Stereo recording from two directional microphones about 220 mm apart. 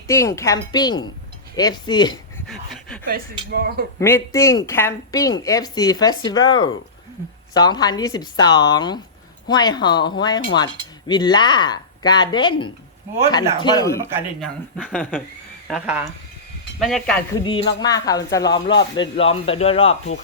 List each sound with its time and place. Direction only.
0.1 s speech: 15° left (ahead or behind)
2.5 s a sound: centre (ahead or behind)
3.1 s speech: 45° right (ahead or behind)
4.0 s speech: 10° left (ahead or behind)
14.4 s speech: 5° right (ahead or behind)
17.4 s speech: 20° left (ahead or behind)